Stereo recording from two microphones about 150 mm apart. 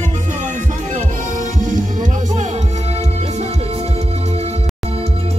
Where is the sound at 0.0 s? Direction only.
50° right (ahead or behind).